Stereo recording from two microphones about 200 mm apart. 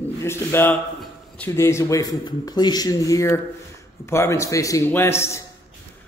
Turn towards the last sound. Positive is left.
turn(degrees=15)  # may be behind; listen again after turning